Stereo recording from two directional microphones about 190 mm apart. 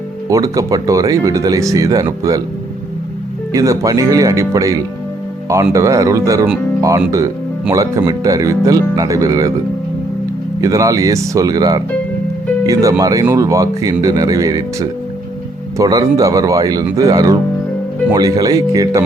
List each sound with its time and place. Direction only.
0.3 s speech: 20° right (ahead or behind)
3.5 s speech: 15° right (ahead or behind)
10.6 s speech: 15° right (ahead or behind)